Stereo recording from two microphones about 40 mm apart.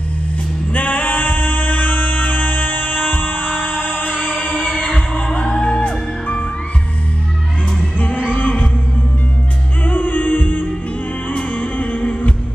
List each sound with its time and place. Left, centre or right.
0.7 s singing: left
8.3 s music: left
9.8 s music: left